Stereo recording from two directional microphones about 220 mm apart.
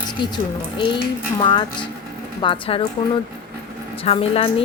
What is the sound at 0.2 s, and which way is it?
Speech, 20° left (ahead or behind).